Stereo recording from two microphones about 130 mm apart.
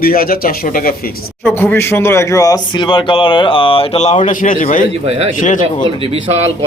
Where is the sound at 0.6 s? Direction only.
90° left.